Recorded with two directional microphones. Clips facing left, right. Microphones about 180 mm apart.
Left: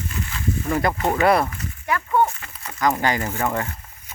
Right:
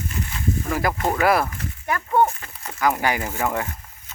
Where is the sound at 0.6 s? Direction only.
Centre (ahead or behind).